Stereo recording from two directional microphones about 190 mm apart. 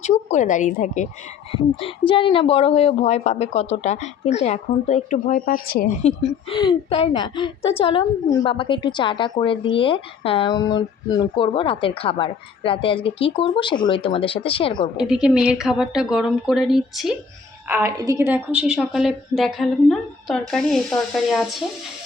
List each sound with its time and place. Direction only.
0.0 s a woman's voice: 40° left (ahead or behind)
1.8 s a woman's voice: 30° left (ahead or behind); by 5.9 s 50° left (ahead or behind)
6.0 s a woman's voice: 35° left (ahead or behind)
14.9 s a woman's voice: 5° right (ahead or behind)
17.7 s a woman's voice: 10° right (ahead or behind)